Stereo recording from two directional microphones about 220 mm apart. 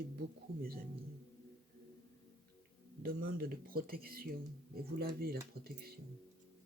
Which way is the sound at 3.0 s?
45° right (ahead or behind).